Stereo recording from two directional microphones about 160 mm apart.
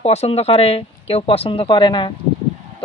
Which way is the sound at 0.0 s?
40° left (ahead or behind).